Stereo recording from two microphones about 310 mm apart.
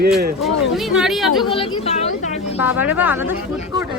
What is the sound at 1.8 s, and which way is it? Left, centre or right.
Speech, left.